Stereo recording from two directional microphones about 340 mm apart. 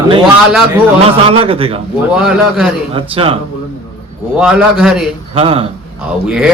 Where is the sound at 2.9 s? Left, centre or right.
Centre.